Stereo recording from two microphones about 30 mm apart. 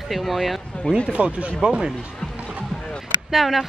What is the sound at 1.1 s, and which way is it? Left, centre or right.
Speech, right.